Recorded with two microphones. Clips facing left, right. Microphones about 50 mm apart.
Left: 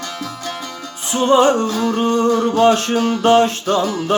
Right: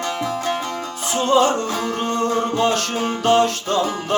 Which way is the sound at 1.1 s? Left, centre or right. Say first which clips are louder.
Left 4 dB; left.